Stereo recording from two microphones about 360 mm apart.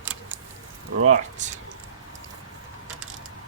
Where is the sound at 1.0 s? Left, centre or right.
Centre.